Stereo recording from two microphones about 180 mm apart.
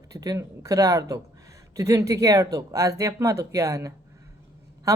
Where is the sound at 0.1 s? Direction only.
20° right (ahead or behind).